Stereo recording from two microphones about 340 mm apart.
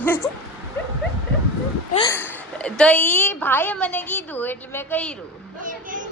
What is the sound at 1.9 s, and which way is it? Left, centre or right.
Speech, centre.